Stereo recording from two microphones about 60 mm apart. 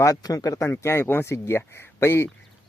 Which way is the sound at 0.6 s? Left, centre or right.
Left.